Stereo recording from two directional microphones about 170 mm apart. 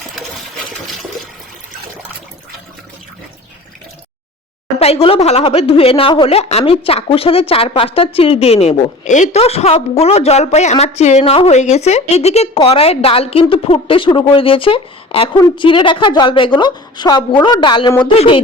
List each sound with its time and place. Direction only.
4.8 s a woman's voice: 35° left (ahead or behind)